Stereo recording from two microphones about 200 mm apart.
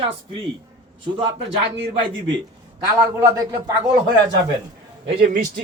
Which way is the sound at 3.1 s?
15° right (ahead or behind).